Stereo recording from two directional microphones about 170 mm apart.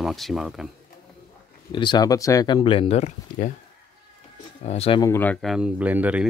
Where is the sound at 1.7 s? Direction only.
25° left (ahead or behind); by 3.5 s 45° left (ahead or behind).